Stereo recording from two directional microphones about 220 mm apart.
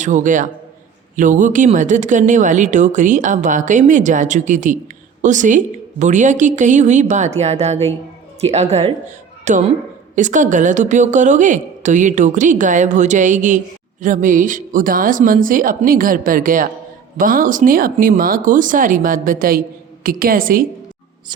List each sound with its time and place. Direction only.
0.0 s a woman's voice: 35° right (ahead or behind)